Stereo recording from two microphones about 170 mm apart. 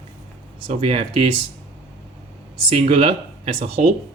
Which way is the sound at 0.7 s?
35° right (ahead or behind).